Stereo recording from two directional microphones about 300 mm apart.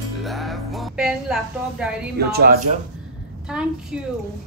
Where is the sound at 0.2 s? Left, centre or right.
Centre.